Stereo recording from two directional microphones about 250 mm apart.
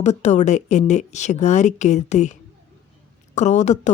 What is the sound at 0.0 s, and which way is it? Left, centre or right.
Speech, left.